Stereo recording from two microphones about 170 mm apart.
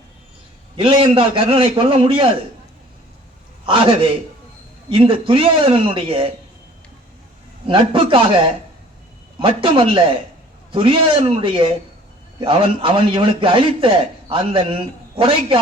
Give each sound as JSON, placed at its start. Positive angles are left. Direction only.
{"t": 0.8, "sound": "a man's voice", "side_deg": -30}
{"t": 3.7, "sound": "a man's voice", "side_deg": -30}
{"t": 7.7, "sound": "a man's voice", "side_deg": -30}
{"t": 9.4, "sound": "a man's voice", "side_deg": -30}